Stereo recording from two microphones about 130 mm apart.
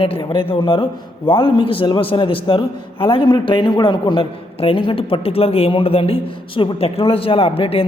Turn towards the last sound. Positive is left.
turn(degrees=45)  # may be behind; listen again after turning